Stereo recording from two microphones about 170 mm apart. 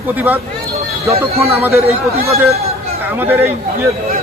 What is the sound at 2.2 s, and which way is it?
Speech, 40° right (ahead or behind).